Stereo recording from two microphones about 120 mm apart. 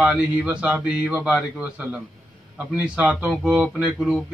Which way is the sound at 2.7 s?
10° right (ahead or behind).